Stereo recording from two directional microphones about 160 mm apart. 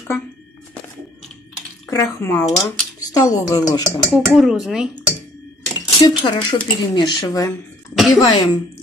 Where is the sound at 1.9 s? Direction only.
15° left (ahead or behind).